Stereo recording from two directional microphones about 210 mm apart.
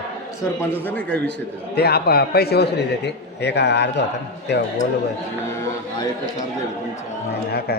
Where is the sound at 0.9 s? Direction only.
10° left (ahead or behind).